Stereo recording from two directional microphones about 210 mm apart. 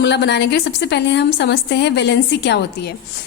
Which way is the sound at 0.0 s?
55° left (ahead or behind).